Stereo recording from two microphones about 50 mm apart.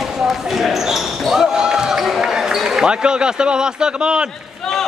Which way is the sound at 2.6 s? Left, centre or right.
Centre.